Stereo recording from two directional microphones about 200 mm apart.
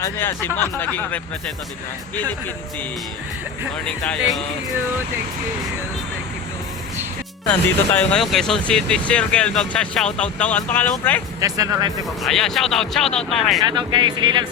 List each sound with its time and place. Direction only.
0.0 s speech: 10° left (ahead or behind)
3.8 s speech: 5° left (ahead or behind)
7.9 s speech: 5° left (ahead or behind)
11.3 s speech: 15° right (ahead or behind)
12.2 s speech: centre (ahead or behind)
13.6 s speech: 20° right (ahead or behind)